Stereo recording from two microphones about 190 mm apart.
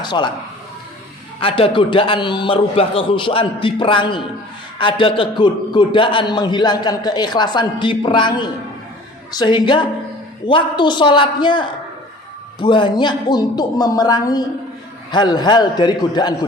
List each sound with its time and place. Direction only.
0.0 s a man's voice: 25° left (ahead or behind)
1.4 s a man's voice: 30° left (ahead or behind)